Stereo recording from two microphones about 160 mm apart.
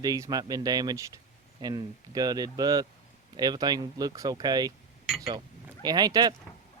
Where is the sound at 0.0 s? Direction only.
25° right (ahead or behind).